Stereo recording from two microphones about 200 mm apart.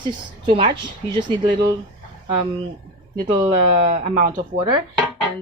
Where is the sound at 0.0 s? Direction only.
25° right (ahead or behind).